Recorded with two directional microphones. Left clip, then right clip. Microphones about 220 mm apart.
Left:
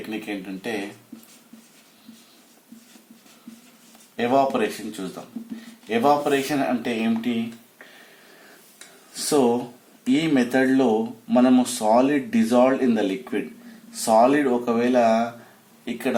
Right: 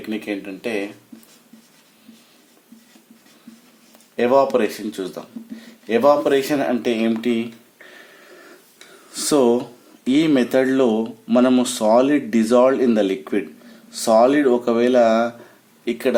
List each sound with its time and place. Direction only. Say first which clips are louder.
0.1 s speech: right 6 dB; 50° right (ahead or behind)
4.2 s speech: right 4 dB; 50° right (ahead or behind)
5.9 s speech: right 4 dB; 50° right (ahead or behind)
9.1 s speech: right 4 dB; 45° right (ahead or behind)